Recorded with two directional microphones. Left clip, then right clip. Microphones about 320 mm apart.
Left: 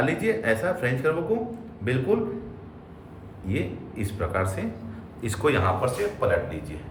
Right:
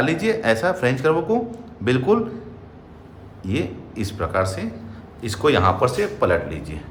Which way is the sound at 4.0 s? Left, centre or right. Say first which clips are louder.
Right 6 dB; centre.